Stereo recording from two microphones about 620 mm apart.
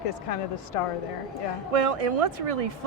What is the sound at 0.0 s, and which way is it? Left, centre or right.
Speech, left.